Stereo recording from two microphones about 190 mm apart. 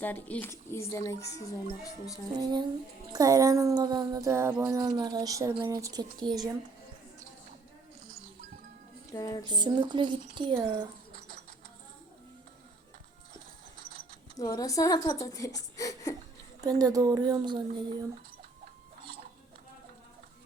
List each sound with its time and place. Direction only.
0.0 s a woman's voice: 10° left (ahead or behind)
2.4 s speech: 20° right (ahead or behind)
9.1 s a sound: 20° left (ahead or behind)
9.6 s speech: 25° right (ahead or behind)
14.3 s a woman's voice: 20° left (ahead or behind)
16.6 s speech: 20° right (ahead or behind)